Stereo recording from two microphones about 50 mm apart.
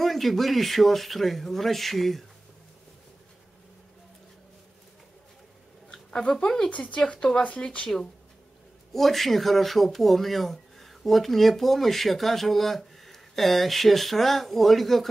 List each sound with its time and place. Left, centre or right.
0.0 s speech: centre
5.9 s speech: centre
6.7 s speech: left
8.9 s speech: centre